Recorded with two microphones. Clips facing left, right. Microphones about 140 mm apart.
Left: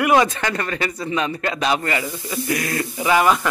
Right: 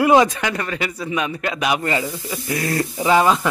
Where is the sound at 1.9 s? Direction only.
25° right (ahead or behind).